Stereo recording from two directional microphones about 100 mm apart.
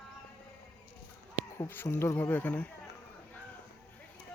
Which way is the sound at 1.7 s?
25° left (ahead or behind).